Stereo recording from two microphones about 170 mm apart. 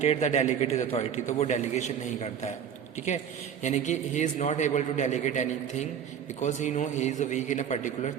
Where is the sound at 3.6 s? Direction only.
45° left (ahead or behind).